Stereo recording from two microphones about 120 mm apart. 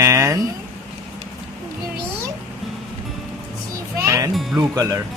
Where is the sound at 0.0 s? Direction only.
25° right (ahead or behind).